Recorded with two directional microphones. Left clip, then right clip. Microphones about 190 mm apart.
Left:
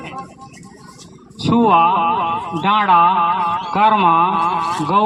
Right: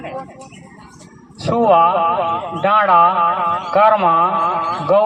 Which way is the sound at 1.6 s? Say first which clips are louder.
Right 1 dB; 35° left (ahead or behind).